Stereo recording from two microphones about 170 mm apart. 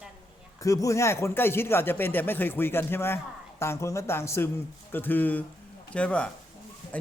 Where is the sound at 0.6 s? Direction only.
20° left (ahead or behind).